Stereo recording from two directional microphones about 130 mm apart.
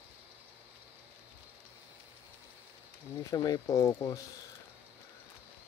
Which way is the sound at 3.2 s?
30° left (ahead or behind).